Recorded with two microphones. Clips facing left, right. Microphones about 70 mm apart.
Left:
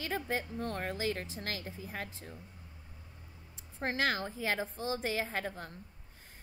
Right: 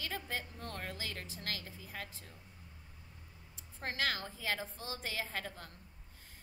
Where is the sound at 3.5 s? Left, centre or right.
Left.